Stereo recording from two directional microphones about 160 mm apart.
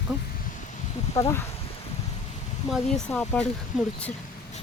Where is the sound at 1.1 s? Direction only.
20° left (ahead or behind).